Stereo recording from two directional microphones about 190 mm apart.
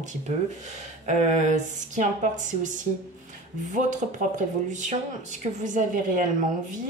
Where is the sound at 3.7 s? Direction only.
40° right (ahead or behind).